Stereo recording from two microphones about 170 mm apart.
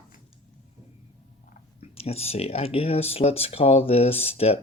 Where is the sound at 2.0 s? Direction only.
35° left (ahead or behind).